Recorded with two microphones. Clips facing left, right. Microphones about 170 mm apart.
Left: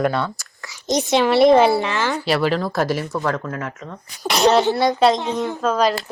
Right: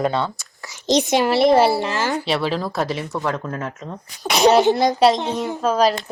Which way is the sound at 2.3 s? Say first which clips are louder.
Left 2 dB; centre (ahead or behind).